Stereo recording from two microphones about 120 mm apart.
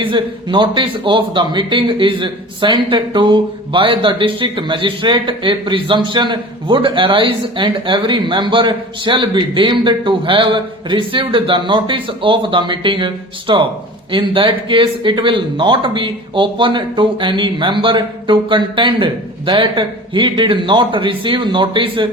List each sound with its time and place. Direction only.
0.0 s speech: 45° right (ahead or behind)